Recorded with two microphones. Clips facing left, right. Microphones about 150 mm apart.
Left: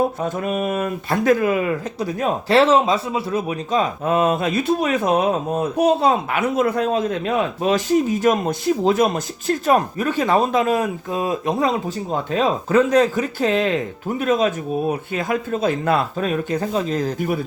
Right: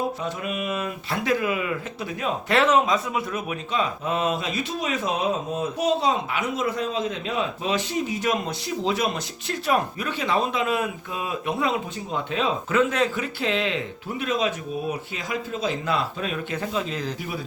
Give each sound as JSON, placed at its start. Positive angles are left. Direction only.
{"t": 0.2, "sound": "speech", "side_deg": 45}